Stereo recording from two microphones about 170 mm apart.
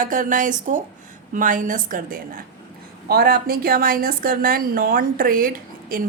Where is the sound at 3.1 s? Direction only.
65° right (ahead or behind).